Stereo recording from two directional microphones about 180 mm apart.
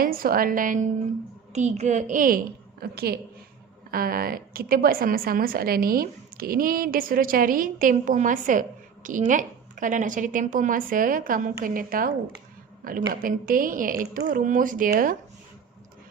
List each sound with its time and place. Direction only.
0.0 s a woman's voice: 55° right (ahead or behind)
2.8 s a woman's voice: 60° right (ahead or behind)